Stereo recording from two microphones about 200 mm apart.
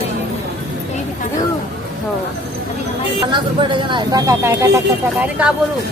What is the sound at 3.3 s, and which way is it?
Speech, 25° right (ahead or behind).